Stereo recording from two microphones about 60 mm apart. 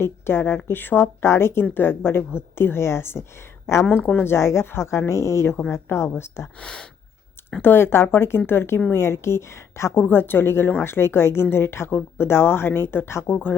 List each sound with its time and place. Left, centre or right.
0.0 s a woman's voice: left
3.8 s speech: left
4.2 s a woman's voice: left
6.6 s a sound: centre
7.6 s a woman's voice: left
10.1 s a woman's voice: left